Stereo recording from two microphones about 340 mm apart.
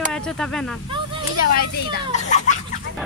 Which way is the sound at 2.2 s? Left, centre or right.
Left.